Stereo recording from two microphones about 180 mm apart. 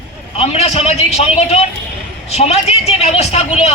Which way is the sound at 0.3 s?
35° left (ahead or behind).